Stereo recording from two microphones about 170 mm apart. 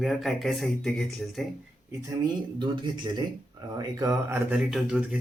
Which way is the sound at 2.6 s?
25° right (ahead or behind).